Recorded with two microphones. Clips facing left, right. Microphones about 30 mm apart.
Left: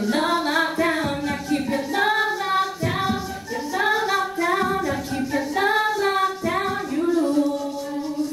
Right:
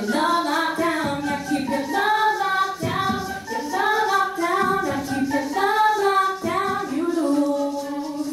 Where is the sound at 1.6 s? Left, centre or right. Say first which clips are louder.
Right 1 dB; centre.